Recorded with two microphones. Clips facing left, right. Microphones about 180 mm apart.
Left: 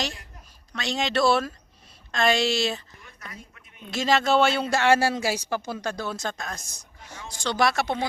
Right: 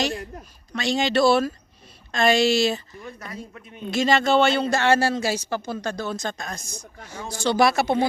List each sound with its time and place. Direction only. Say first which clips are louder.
0.7 s speech: right 5 dB; centre (ahead or behind)
3.0 s speech: right 9 dB; 35° right (ahead or behind)
3.9 s speech: right 2 dB; centre (ahead or behind)